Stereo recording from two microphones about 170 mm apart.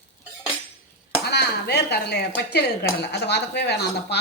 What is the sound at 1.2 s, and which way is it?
Speech, 75° left (ahead or behind).